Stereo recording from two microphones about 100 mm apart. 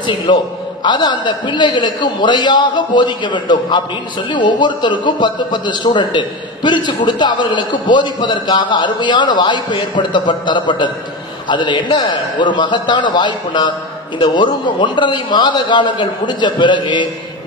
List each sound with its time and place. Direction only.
0.3 s a man's voice: 50° left (ahead or behind)